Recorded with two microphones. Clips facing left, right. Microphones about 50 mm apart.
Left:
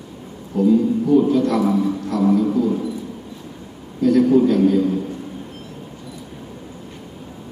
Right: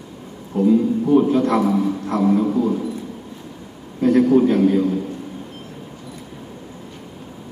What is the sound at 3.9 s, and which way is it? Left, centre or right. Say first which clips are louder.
Speech: even; right.